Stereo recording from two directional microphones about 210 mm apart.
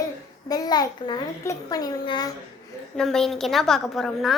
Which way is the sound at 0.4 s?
20° left (ahead or behind).